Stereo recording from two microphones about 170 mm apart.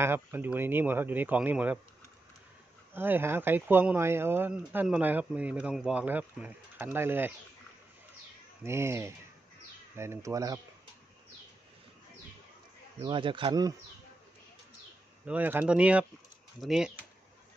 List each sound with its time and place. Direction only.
0.0 s speech: 15° right (ahead or behind)
2.9 s speech: 10° right (ahead or behind)
8.6 s speech: 15° right (ahead or behind)
13.0 s speech: 30° right (ahead or behind)
15.2 s speech: 10° right (ahead or behind)